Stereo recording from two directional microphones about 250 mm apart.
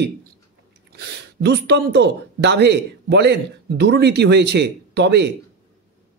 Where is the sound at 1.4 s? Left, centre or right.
Right.